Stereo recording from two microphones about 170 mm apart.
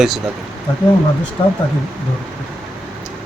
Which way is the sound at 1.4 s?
30° left (ahead or behind).